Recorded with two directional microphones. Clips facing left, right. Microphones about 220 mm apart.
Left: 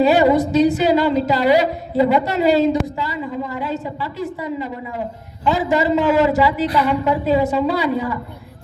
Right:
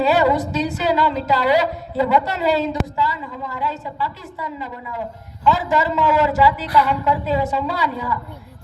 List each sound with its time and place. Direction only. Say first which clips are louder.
0.0 s a woman's voice: left 3 dB; 15° left (ahead or behind)